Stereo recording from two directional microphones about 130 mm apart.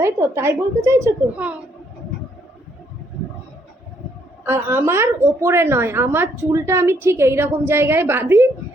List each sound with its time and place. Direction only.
0.0 s a woman's voice: 20° right (ahead or behind)
4.4 s a woman's voice: 15° right (ahead or behind)